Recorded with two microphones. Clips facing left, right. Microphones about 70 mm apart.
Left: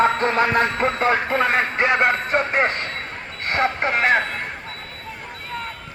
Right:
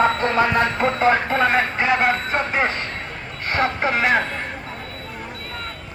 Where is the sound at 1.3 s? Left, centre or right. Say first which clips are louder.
Right 1 dB; centre.